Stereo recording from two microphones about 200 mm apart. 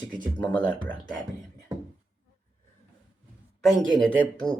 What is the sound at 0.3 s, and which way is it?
Speech, 5° left (ahead or behind).